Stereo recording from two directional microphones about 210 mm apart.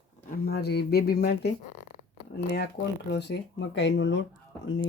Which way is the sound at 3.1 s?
55° left (ahead or behind).